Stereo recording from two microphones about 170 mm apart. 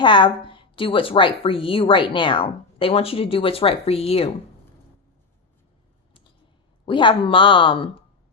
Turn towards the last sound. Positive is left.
turn(degrees=30)  # may be behind; listen again after turning